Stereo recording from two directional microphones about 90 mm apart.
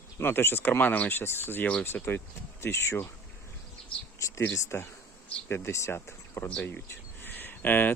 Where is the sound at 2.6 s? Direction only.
30° left (ahead or behind).